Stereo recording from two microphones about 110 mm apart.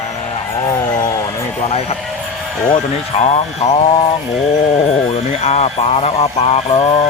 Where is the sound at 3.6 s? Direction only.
90° left.